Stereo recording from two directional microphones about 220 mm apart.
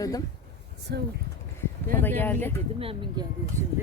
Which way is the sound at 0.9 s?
50° right (ahead or behind).